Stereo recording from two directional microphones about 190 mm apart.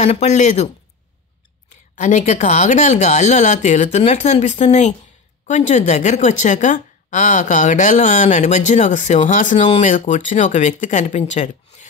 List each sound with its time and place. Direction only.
0.0 s a woman's voice: 35° left (ahead or behind)
2.0 s a woman's voice: 40° left (ahead or behind)